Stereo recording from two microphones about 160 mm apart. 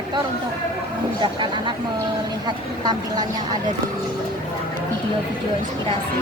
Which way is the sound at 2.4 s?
25° right (ahead or behind).